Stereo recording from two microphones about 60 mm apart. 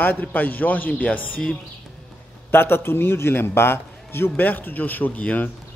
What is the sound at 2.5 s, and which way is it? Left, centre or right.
A man's voice, left.